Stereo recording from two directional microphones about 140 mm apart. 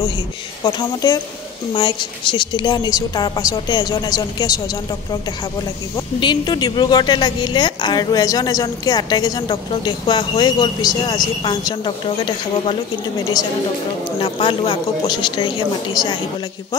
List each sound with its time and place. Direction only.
0.7 s a woman's voice: 30° left (ahead or behind)
6.1 s a woman's voice: 30° left (ahead or behind)
14.2 s a woman's voice: 40° left (ahead or behind)